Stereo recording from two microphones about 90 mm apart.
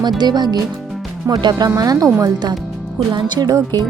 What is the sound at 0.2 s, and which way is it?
Speech, 50° right (ahead or behind).